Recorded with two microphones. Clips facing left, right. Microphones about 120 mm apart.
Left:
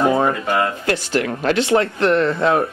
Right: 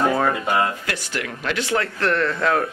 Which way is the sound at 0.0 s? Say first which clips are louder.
Left 3 dB; 20° left (ahead or behind).